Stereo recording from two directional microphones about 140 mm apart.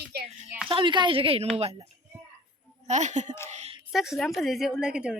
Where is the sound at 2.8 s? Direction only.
60° right (ahead or behind).